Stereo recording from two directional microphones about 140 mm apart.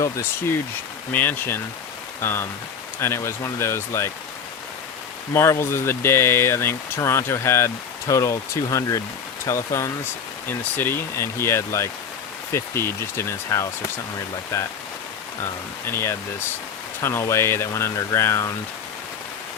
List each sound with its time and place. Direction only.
1.1 s speech: 15° left (ahead or behind)
5.3 s speech: 20° left (ahead or behind)
15.9 s speech: 20° left (ahead or behind)